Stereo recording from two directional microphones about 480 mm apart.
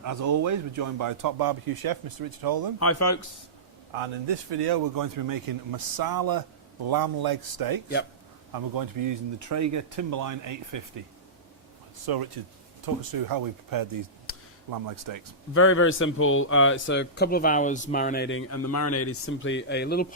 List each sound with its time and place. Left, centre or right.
0.0 s speech: right
2.7 s speech: left
3.9 s speech: right
12.0 s speech: right
14.3 s a sound: left
14.7 s speech: right
15.5 s speech: left